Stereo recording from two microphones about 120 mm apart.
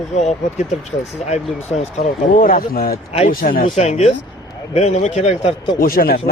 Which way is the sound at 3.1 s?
60° left (ahead or behind).